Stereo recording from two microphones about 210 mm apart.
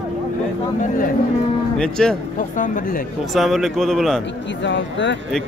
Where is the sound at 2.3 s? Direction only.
40° left (ahead or behind).